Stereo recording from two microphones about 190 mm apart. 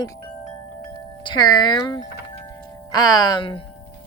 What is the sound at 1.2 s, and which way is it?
Speech, 25° left (ahead or behind).